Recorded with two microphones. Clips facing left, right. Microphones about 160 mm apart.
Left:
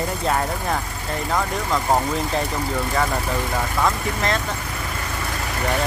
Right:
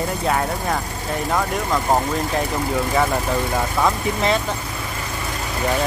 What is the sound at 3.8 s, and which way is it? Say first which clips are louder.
Speech: right 3 dB; 15° right (ahead or behind).